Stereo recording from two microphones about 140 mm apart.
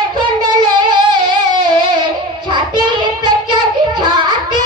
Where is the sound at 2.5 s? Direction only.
35° right (ahead or behind).